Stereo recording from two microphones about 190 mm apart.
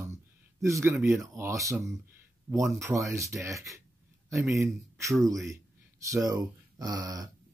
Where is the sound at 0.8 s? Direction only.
15° right (ahead or behind).